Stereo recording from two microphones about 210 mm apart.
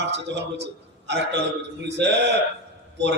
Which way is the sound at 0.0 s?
55° right (ahead or behind).